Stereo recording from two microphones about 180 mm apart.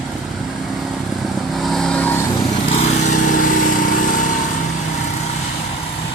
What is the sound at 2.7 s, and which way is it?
Lawn mower, 35° left (ahead or behind).